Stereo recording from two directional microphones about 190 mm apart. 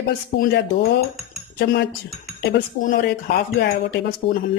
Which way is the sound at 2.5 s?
50° left (ahead or behind).